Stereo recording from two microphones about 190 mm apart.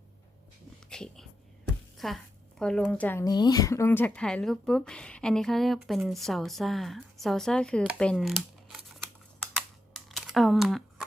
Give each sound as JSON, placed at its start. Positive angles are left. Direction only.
{"t": 0.9, "sound": "a sound", "side_deg": 5}
{"t": 2.0, "sound": "speech", "side_deg": 0}
{"t": 7.9, "sound": "computer keyboard", "side_deg": 5}